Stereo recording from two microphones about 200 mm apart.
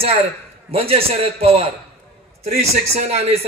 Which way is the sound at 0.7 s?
30° right (ahead or behind).